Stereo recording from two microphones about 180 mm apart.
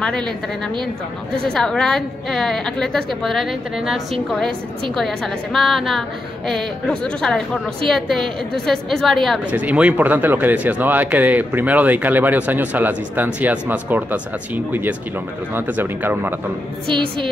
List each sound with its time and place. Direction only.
0.0 s a woman's voice: 5° left (ahead or behind)
1.3 s a woman's voice: 5° left (ahead or behind)
16.8 s a woman's voice: 30° right (ahead or behind)